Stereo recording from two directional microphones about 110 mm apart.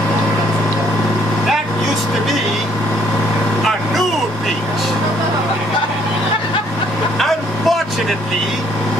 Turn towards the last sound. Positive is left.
turn(degrees=0)  # may be behind; listen again after turning